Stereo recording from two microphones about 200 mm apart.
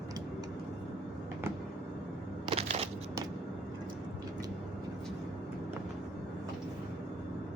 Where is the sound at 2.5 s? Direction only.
30° right (ahead or behind).